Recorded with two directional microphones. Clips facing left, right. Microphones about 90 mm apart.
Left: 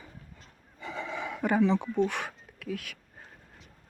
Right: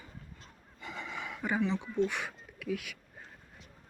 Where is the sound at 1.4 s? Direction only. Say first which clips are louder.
Left 6 dB; 55° left (ahead or behind).